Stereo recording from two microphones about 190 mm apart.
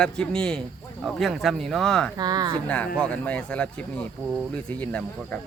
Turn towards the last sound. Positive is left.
turn(degrees=5)  # may be behind; listen again after turning